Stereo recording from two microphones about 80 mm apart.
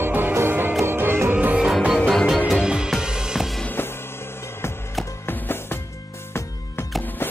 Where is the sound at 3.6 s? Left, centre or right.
Left.